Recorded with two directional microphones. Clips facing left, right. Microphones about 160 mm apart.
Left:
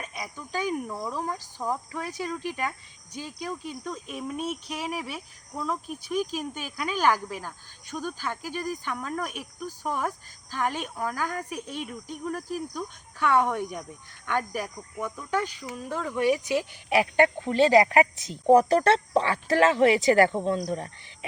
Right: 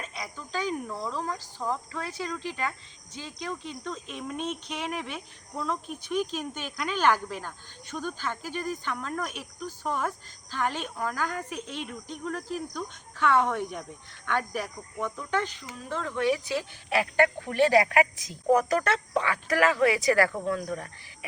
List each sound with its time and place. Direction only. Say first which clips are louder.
0.0 s speech: left 1 dB; 15° left (ahead or behind)